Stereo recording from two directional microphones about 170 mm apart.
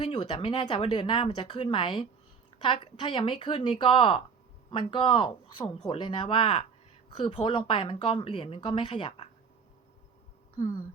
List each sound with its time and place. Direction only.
0.0 s speech: 30° left (ahead or behind)